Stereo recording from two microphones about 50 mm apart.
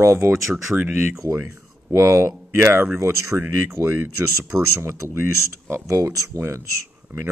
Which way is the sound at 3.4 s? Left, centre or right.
Right.